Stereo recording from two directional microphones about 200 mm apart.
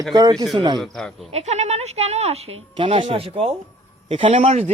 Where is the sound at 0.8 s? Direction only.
Centre (ahead or behind).